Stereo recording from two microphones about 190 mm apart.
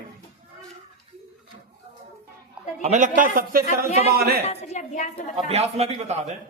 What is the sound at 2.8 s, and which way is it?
Speech, 40° right (ahead or behind).